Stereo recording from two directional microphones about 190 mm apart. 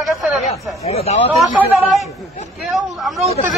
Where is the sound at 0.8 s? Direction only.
35° left (ahead or behind).